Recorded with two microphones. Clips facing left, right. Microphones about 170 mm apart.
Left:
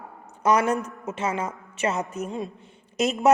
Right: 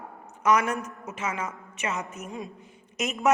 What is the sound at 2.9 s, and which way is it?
Speech, 35° left (ahead or behind).